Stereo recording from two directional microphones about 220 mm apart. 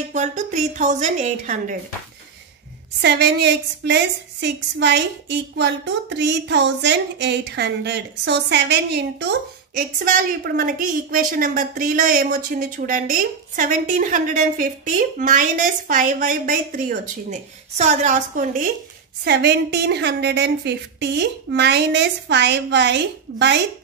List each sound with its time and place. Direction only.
0.1 s a woman's voice: 35° right (ahead or behind)
3.0 s a woman's voice: 50° right (ahead or behind)
19.2 s a woman's voice: 50° right (ahead or behind)